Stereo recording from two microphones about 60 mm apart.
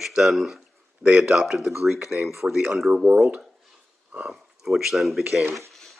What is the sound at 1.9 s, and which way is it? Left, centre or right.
Speech, centre.